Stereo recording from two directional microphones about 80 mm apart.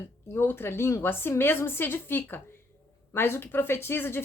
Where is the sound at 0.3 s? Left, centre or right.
Left.